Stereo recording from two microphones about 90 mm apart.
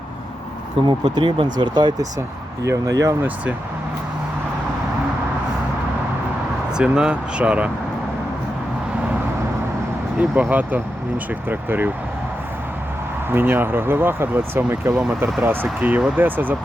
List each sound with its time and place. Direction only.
0.9 s speech: 60° right (ahead or behind)
2.6 s speech: 35° right (ahead or behind)
6.7 s speech: 10° right (ahead or behind)
10.2 s speech: 15° right (ahead or behind)
13.3 s speech: 20° right (ahead or behind)